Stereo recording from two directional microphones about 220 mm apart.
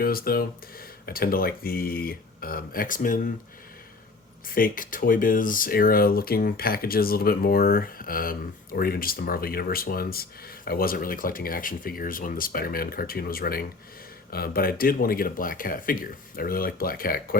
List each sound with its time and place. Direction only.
0.0 s speech: 40° left (ahead or behind)
4.4 s speech: 40° left (ahead or behind)